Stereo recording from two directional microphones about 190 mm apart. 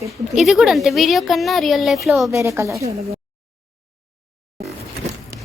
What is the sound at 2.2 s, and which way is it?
Speech, 15° right (ahead or behind).